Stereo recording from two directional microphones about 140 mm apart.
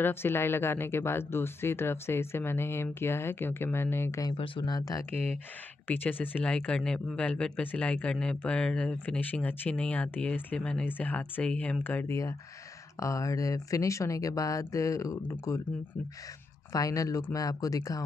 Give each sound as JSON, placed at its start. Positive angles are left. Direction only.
{"t": 0.0, "sound": "speech", "side_deg": 15}
{"t": 4.3, "sound": "speech", "side_deg": 35}
{"t": 5.1, "sound": "speech", "side_deg": -50}
{"t": 5.9, "sound": "speech", "side_deg": 15}
{"t": 16.7, "sound": "speech", "side_deg": 25}